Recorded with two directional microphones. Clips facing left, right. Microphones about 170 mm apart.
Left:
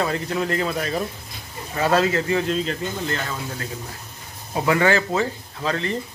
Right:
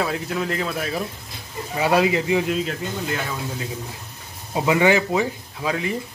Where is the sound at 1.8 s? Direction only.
15° right (ahead or behind).